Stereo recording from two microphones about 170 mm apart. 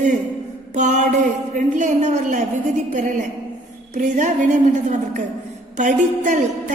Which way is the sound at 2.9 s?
50° right (ahead or behind).